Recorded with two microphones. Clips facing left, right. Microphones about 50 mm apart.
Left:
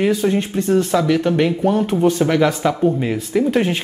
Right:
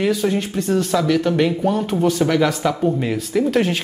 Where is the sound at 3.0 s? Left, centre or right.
Centre.